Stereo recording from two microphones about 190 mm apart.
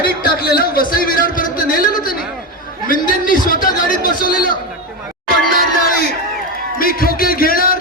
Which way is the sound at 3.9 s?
45° left (ahead or behind).